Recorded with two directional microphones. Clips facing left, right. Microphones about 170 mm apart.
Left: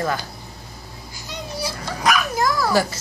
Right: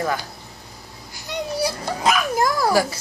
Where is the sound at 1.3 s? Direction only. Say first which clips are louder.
Right 6 dB; 60° right (ahead or behind).